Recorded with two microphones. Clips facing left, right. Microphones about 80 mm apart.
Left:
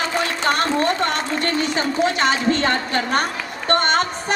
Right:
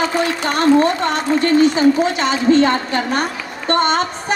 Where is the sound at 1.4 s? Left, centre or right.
Left.